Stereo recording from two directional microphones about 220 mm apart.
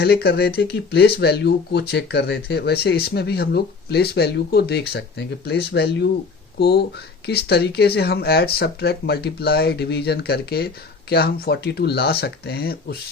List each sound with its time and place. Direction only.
0.0 s speech: 45° left (ahead or behind)